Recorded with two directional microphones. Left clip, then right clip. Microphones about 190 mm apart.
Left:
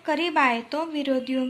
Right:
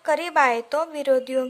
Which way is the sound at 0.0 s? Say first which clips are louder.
Right 2 dB; 55° right (ahead or behind).